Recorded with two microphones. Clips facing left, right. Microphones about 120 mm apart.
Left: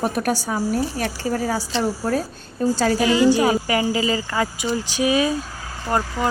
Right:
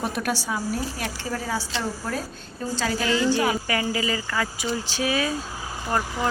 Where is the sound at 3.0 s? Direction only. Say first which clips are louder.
Left 5 dB; 15° left (ahead or behind).